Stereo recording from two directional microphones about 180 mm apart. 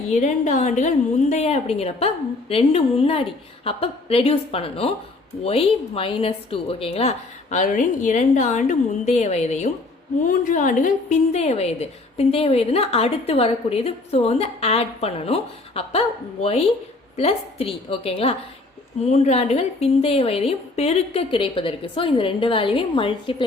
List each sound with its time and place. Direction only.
0.1 s a woman's voice: 40° left (ahead or behind)